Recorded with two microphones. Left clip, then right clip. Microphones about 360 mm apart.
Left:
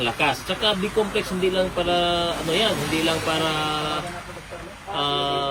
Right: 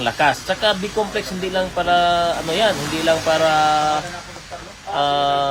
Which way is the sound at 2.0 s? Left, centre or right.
Right.